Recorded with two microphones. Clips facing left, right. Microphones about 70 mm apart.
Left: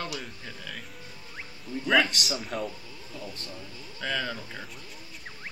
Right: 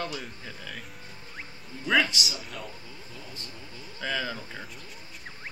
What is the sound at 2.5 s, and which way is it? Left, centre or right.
Speech, left.